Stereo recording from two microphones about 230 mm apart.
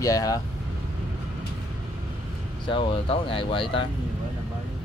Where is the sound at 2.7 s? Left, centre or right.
Left.